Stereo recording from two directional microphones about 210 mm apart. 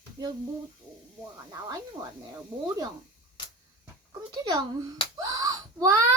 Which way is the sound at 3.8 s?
15° right (ahead or behind).